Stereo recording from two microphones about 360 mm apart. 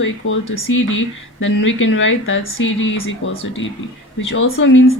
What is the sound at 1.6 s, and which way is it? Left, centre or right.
A woman's voice, left.